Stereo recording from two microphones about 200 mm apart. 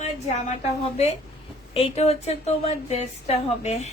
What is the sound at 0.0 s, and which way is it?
Speech, 35° left (ahead or behind).